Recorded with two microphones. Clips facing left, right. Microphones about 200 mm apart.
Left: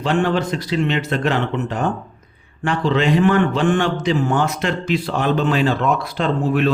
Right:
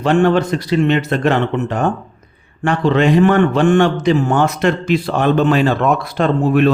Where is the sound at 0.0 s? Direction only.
55° right (ahead or behind).